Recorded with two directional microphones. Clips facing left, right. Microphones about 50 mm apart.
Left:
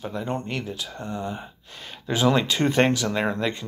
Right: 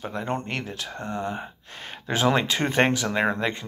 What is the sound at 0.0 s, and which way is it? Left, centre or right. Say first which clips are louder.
Speech: even; right.